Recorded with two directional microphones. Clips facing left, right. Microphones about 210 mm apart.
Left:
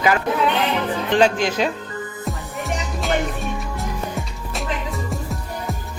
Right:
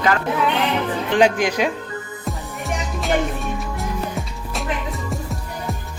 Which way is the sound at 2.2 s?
Centre (ahead or behind).